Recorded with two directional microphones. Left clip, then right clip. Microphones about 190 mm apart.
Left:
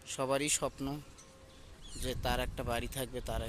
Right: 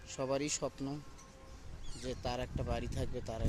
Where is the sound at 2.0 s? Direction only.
Centre (ahead or behind).